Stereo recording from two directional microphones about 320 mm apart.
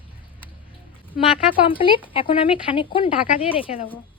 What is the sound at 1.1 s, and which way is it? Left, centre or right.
A woman's voice, left.